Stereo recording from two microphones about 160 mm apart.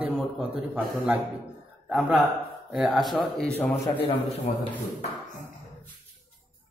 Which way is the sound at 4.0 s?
35° left (ahead or behind).